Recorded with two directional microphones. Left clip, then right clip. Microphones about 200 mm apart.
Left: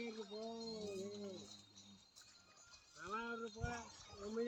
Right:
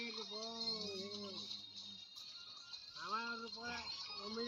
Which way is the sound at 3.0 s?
45° left (ahead or behind).